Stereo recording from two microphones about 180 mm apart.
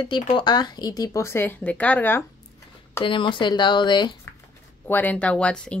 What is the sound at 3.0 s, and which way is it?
Speech, 25° left (ahead or behind).